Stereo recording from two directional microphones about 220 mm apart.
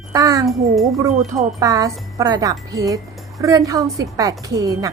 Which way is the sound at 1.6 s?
15° right (ahead or behind).